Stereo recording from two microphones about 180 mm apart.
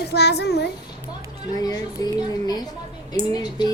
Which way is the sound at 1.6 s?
20° left (ahead or behind).